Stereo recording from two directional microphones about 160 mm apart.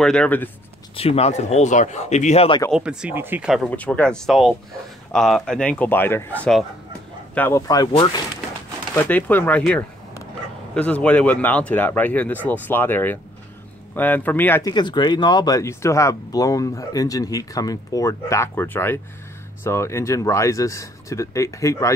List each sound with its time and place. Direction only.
0.0 s speech: 5° left (ahead or behind)
0.9 s speech: 40° left (ahead or behind)
2.7 s speech: 5° right (ahead or behind)
3.7 s speech: 10° left (ahead or behind)
8.9 s speech: 10° left (ahead or behind)
14.7 s speech: 30° left (ahead or behind)